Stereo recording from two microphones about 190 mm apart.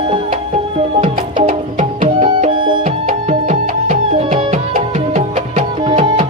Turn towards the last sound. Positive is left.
turn(degrees=-35)  # may be behind; listen again after turning